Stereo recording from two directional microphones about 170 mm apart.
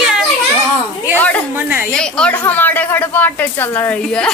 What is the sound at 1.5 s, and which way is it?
Speech, 10° right (ahead or behind).